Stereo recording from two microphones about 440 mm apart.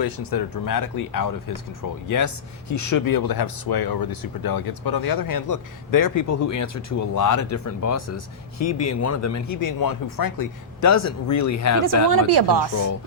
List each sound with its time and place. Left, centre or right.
0.0 s speech: left
12.3 s speech: right